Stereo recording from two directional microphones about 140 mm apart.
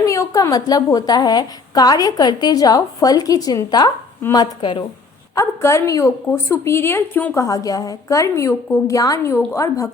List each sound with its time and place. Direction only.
0.0 s a woman's voice: 20° left (ahead or behind)
7.4 s a woman's voice: 25° left (ahead or behind)